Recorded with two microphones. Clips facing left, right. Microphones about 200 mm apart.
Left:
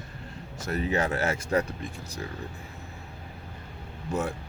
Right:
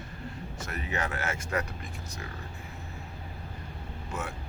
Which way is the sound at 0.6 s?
35° left (ahead or behind).